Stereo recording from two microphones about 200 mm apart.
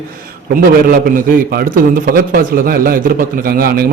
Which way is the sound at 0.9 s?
50° right (ahead or behind).